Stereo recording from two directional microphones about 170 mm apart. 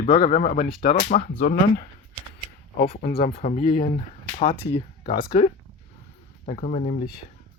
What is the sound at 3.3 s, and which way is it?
Speech, 50° left (ahead or behind).